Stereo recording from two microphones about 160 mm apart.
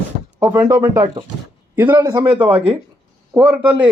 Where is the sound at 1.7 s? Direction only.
10° right (ahead or behind).